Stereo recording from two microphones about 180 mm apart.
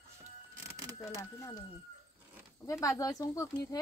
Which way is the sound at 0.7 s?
15° right (ahead or behind).